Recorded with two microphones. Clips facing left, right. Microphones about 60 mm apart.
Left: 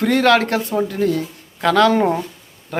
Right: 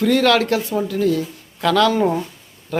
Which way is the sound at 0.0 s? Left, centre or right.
Left.